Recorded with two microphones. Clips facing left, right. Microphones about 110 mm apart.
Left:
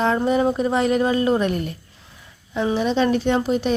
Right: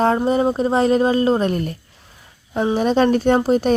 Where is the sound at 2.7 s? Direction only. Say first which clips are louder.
Right 4 dB; 45° right (ahead or behind).